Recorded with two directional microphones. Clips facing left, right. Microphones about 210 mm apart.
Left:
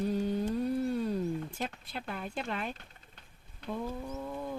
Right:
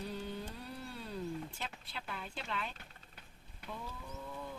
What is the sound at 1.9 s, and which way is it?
Speech, 50° left (ahead or behind).